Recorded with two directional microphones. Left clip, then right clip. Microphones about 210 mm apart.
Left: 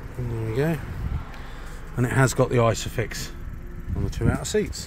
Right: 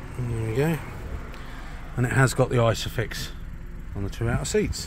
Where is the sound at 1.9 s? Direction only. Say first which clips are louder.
Left 1 dB; 10° left (ahead or behind).